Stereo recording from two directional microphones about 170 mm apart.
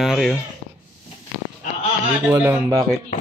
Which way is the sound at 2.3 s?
15° right (ahead or behind).